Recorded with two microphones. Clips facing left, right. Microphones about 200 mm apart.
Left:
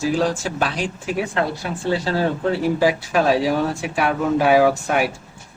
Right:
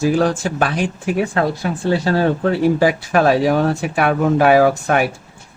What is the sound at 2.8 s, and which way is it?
Speech, 60° right (ahead or behind).